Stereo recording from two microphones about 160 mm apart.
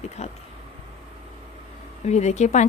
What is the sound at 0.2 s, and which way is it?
Speech, 45° left (ahead or behind).